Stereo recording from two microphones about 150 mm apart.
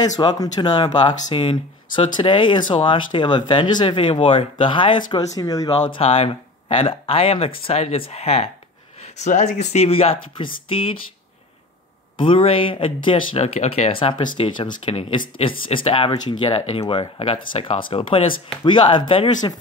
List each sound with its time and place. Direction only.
0.2 s speech: 30° left (ahead or behind)
5.9 s speech: 40° left (ahead or behind)
12.2 s speech: 35° left (ahead or behind)